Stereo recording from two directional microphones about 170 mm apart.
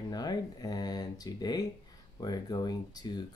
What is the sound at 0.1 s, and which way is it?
Speech, 25° left (ahead or behind).